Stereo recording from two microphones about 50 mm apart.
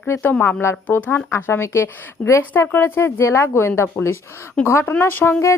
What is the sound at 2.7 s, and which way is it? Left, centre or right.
A woman's voice, left.